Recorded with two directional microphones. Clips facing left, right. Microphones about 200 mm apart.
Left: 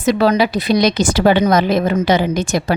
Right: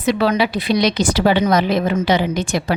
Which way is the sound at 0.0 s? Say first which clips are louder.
Left 3 dB; 40° left (ahead or behind).